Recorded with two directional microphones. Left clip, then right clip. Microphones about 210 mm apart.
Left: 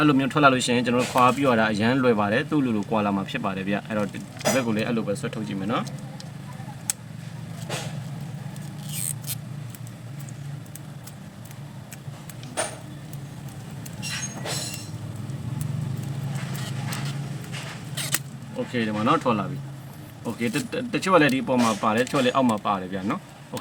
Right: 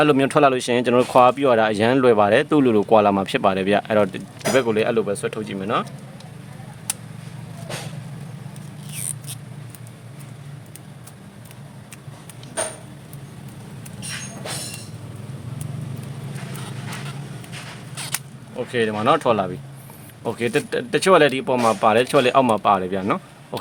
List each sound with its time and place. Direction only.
0.0 s speech: 55° right (ahead or behind)
18.7 s speech: 55° right (ahead or behind)